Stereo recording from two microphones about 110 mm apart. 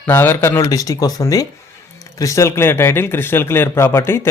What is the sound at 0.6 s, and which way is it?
A man's voice, 30° left (ahead or behind).